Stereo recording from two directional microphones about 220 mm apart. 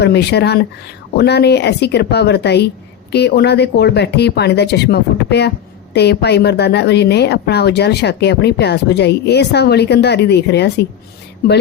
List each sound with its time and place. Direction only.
0.0 s a woman's voice: 50° left (ahead or behind)